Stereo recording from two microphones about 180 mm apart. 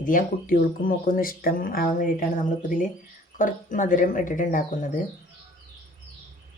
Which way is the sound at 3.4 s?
45° left (ahead or behind).